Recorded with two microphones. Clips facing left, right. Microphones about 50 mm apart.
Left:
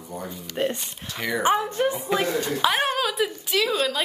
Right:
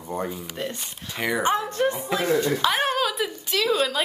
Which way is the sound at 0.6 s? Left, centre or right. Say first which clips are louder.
Left 7 dB; left.